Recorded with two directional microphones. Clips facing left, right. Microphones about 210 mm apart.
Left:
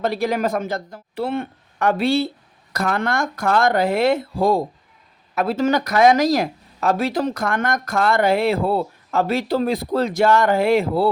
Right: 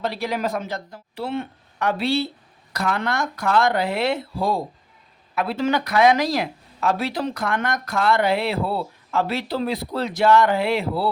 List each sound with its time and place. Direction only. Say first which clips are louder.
0.0 s speech: left 4 dB; 50° left (ahead or behind)